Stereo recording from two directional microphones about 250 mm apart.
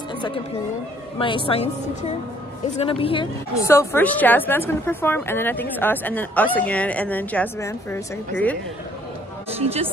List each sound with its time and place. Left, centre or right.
1.1 s a woman's voice: centre
9.6 s speech: right